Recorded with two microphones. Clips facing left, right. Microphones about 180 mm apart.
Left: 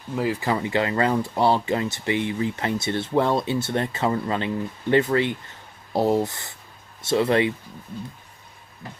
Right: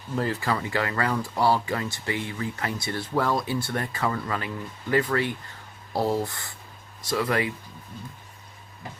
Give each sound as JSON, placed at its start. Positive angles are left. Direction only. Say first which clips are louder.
{"t": 0.2, "sound": "speech", "louder": "left 3 dB", "side_deg": 15}